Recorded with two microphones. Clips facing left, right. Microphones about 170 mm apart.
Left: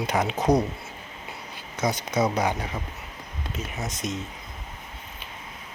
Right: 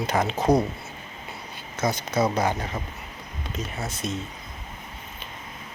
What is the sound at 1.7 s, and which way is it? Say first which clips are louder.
Speech: even; 15° left (ahead or behind).